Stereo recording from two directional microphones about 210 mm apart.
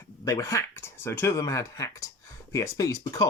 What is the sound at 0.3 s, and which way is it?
Speech, 15° left (ahead or behind).